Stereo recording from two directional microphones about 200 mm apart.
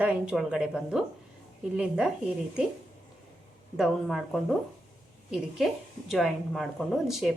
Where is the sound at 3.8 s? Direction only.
Centre (ahead or behind).